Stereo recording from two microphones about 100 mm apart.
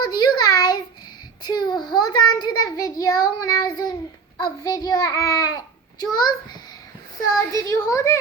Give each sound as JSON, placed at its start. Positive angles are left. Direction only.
{"t": 0.0, "sound": "a sound", "side_deg": 45}
{"t": 1.5, "sound": "a child's voice", "side_deg": 45}
{"t": 7.5, "sound": "a child's voice", "side_deg": 35}